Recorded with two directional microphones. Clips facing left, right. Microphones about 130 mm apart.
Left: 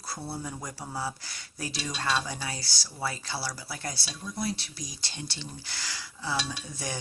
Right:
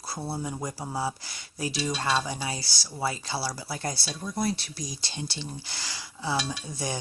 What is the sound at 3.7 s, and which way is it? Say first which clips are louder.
Speech: right 5 dB; 35° right (ahead or behind).